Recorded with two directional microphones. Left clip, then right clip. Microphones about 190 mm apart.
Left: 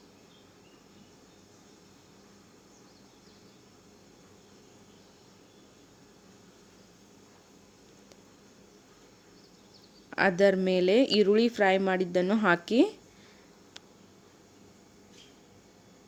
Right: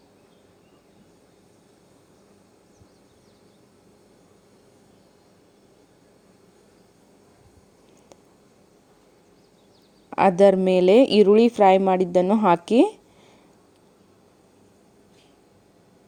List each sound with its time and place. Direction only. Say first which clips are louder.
10.1 s speech: right 8 dB; 35° right (ahead or behind)